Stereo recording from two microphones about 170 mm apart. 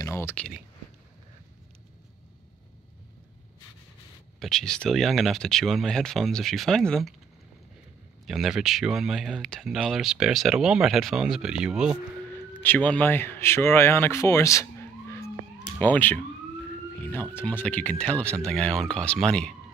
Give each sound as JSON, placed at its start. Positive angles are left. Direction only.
{"t": 0.0, "sound": "a sound", "side_deg": 15}
{"t": 4.4, "sound": "speech", "side_deg": 0}
{"t": 8.3, "sound": "speech", "side_deg": 0}
{"t": 12.6, "sound": "speech", "side_deg": 10}